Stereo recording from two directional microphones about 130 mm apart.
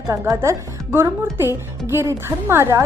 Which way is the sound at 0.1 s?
25° right (ahead or behind).